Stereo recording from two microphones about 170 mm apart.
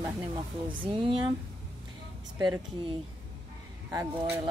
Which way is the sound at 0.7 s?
30° right (ahead or behind).